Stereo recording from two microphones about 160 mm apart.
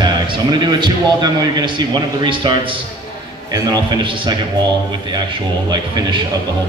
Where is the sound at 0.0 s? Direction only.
25° right (ahead or behind).